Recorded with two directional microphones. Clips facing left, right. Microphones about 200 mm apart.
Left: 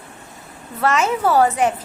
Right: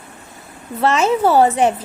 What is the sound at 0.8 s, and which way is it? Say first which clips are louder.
Speech: right 3 dB; 30° right (ahead or behind).